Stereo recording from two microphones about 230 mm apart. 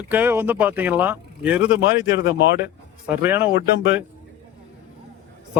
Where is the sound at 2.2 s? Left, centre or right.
Left.